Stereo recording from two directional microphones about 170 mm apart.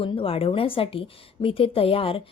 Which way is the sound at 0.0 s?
30° left (ahead or behind).